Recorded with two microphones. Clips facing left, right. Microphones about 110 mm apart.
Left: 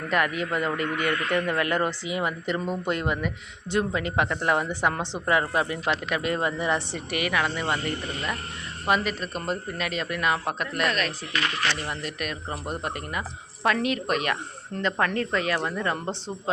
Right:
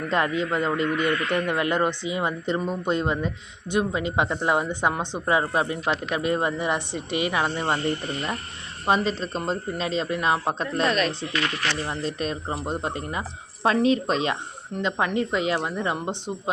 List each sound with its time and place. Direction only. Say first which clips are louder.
0.1 s a man's voice: right 1 dB; 25° right (ahead or behind)